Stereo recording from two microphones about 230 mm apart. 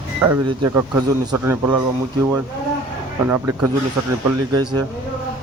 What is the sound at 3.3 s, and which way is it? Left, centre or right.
Speech, centre.